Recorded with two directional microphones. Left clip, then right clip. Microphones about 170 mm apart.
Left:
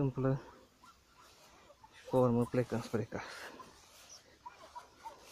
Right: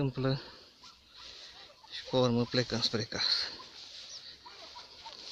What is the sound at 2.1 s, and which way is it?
Speech, 15° right (ahead or behind).